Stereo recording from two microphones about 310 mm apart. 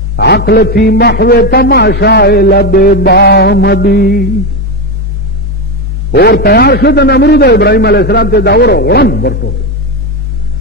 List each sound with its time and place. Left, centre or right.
0.1 s a man's voice: left
6.1 s a man's voice: left